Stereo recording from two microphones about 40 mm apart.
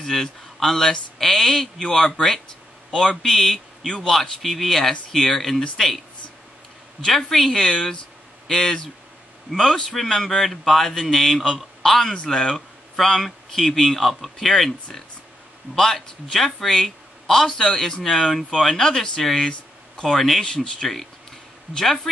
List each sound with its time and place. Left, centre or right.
0.0 s a man's voice: centre
3.2 s a man's voice: centre
7.1 s a man's voice: centre
20.4 s a man's voice: centre